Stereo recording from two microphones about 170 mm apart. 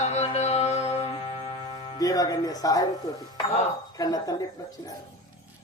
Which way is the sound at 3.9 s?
20° left (ahead or behind).